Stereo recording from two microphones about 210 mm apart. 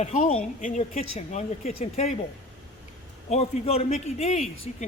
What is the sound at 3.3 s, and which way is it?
Speech, 30° left (ahead or behind).